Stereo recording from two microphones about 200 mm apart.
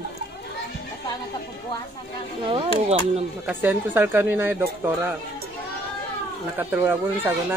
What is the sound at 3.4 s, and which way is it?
Speech, 10° right (ahead or behind).